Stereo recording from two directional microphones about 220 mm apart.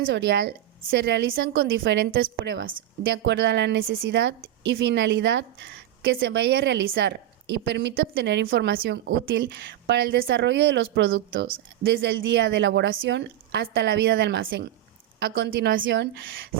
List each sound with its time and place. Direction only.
0.0 s a woman's voice: 50° right (ahead or behind)